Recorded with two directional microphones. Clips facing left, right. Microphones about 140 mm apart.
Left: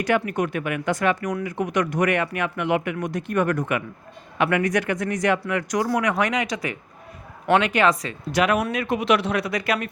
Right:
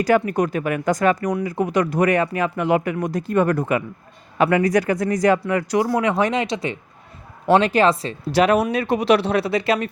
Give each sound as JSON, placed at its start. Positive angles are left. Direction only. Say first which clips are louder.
{"t": 0.0, "sound": "speech", "louder": "right 4 dB", "side_deg": -35}